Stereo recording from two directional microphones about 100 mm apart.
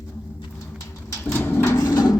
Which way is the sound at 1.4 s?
20° left (ahead or behind).